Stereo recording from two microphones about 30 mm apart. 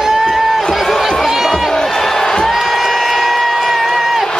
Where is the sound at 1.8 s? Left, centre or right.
Centre.